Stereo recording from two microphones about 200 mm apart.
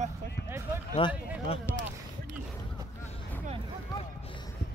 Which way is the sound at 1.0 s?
25° left (ahead or behind).